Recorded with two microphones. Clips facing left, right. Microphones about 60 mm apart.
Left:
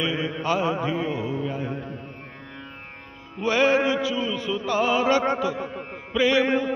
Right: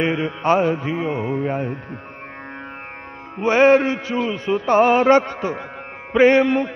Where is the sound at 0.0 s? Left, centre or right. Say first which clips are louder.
Right 6 dB; right.